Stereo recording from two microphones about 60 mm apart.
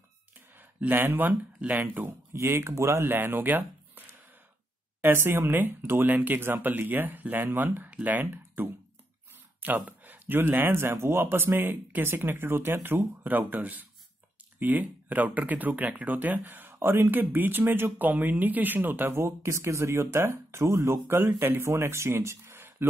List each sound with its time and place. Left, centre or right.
0.6 s a sound: right
1.0 s speech: right
2.3 s speech: right
3.1 s speech: right
5.1 s speech: right